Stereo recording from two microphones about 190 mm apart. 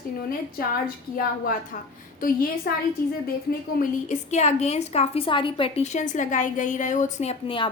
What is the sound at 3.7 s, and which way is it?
A woman's voice, 40° left (ahead or behind).